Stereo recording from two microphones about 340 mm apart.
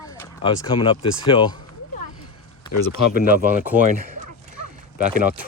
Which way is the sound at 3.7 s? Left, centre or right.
Centre.